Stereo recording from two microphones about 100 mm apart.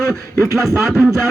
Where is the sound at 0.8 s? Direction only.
5° right (ahead or behind).